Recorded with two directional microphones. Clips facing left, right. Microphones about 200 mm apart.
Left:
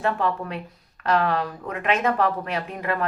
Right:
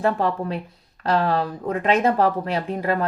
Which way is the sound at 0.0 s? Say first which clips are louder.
Right 3 dB; 35° right (ahead or behind).